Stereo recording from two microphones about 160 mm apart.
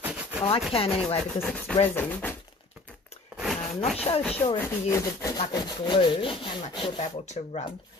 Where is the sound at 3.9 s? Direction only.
40° left (ahead or behind).